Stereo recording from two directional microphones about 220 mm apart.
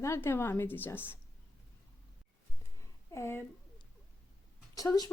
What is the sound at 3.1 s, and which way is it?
Speech, 10° left (ahead or behind).